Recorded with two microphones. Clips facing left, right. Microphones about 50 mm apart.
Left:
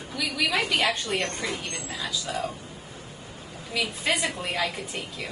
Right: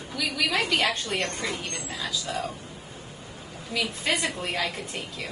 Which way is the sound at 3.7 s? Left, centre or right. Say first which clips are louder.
Even; centre.